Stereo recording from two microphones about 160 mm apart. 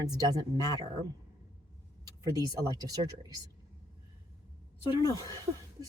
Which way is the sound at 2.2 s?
25° right (ahead or behind).